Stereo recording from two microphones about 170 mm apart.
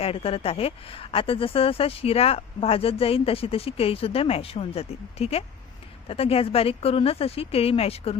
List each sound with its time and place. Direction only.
0.0 s speech: 35° left (ahead or behind)